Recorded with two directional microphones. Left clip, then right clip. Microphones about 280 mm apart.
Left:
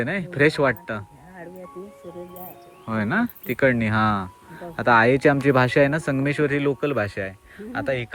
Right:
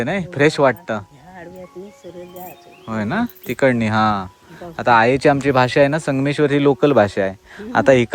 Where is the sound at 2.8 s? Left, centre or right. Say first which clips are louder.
Right 2 dB; centre.